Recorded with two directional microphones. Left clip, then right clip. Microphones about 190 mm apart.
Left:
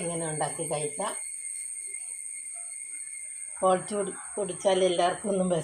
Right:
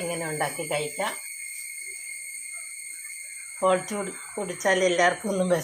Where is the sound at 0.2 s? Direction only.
20° right (ahead or behind).